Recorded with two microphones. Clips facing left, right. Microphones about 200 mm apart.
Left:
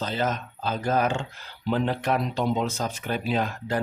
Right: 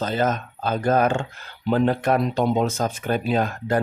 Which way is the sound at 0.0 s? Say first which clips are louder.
Right 5 dB; 50° right (ahead or behind).